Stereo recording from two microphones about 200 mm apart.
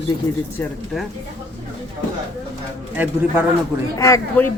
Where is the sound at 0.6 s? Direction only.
Centre (ahead or behind).